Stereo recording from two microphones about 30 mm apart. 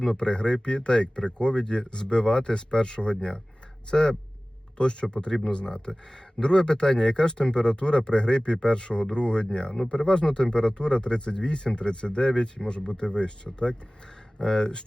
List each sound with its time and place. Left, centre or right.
0.0 s speech: left
4.8 s speech: left